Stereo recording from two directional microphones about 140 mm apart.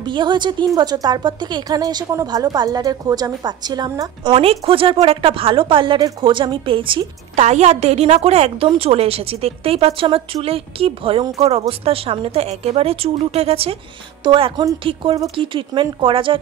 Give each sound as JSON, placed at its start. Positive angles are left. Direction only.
{"t": 0.0, "sound": "a woman's voice", "side_deg": -35}
{"t": 7.3, "sound": "a woman's voice", "side_deg": -55}